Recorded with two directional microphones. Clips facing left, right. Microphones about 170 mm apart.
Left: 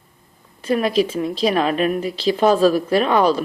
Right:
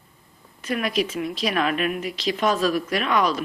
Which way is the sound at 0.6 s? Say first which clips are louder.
Left 6 dB; 30° left (ahead or behind).